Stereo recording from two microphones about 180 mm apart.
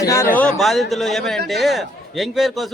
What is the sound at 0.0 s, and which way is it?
A man's voice, 15° left (ahead or behind).